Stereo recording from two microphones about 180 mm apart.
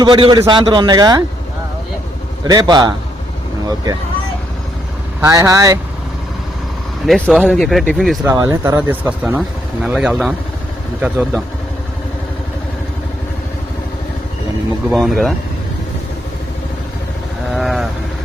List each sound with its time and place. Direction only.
0.0 s a man's voice: 25° right (ahead or behind)
2.4 s a man's voice: 20° right (ahead or behind)
5.2 s a man's voice: 20° right (ahead or behind)
7.1 s speech: 5° left (ahead or behind)
8.3 s speech: 15° right (ahead or behind)
14.8 s speech: centre (ahead or behind)
17.5 s speech: centre (ahead or behind)